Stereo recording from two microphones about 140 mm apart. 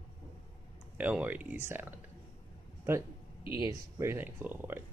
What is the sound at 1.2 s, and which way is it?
Speech, 15° right (ahead or behind).